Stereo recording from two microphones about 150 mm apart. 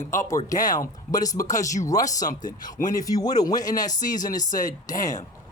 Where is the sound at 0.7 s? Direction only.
25° left (ahead or behind).